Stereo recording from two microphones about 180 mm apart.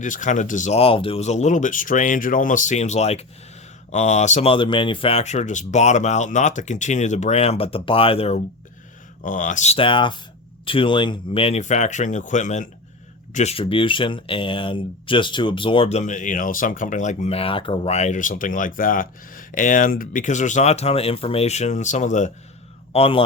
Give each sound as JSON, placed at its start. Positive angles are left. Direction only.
{"t": 0.0, "sound": "speech", "side_deg": 45}
{"t": 9.2, "sound": "speech", "side_deg": 45}
{"t": 22.9, "sound": "speech", "side_deg": 30}